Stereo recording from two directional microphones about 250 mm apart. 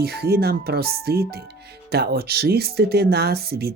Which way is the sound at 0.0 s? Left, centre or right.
Right.